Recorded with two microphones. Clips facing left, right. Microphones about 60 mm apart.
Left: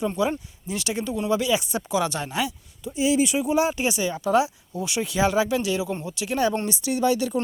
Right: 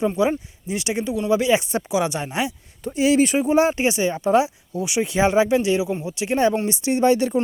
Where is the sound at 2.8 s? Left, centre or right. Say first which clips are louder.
Right 4 dB; right.